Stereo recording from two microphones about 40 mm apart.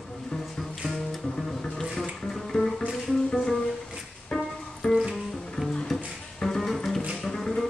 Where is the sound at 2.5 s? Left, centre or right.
Centre.